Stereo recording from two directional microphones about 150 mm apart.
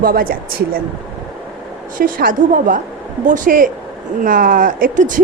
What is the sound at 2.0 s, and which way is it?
A woman's voice, 70° right (ahead or behind).